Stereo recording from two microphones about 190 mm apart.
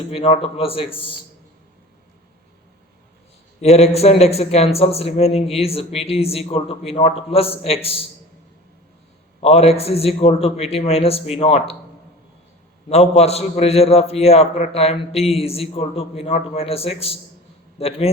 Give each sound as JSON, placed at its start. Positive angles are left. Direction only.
{"t": 0.1, "sound": "a man's voice", "side_deg": 30}
{"t": 3.6, "sound": "a man's voice", "side_deg": 35}
{"t": 9.4, "sound": "a man's voice", "side_deg": 30}
{"t": 12.9, "sound": "a man's voice", "side_deg": 35}